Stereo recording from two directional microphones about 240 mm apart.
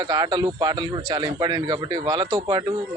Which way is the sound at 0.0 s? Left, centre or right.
Centre.